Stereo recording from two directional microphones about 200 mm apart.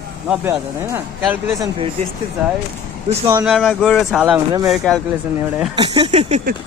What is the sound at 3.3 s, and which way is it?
Speech, 5° right (ahead or behind).